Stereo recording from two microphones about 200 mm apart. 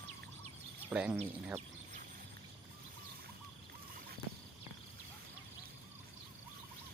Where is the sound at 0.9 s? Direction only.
10° right (ahead or behind).